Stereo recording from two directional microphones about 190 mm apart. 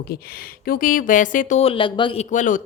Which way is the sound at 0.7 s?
45° left (ahead or behind).